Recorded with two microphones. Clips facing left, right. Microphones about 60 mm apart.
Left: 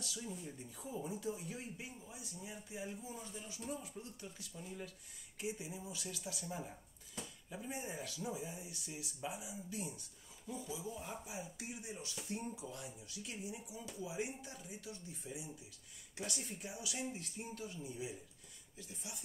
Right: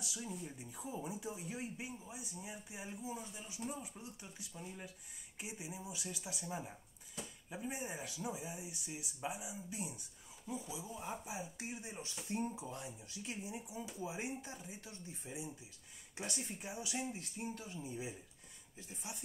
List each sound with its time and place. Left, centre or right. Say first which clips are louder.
0.0 s speech: right 1 dB; centre; by 16.6 s right
17.1 s speech: right 2 dB; centre
17.6 s speech: even; right